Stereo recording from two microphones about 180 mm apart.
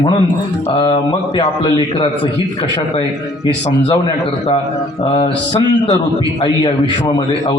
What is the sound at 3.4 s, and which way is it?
Music, 20° left (ahead or behind).